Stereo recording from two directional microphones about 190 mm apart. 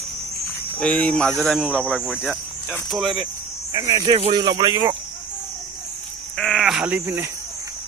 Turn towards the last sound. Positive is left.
turn(degrees=-10)  # may be behind; listen again after turning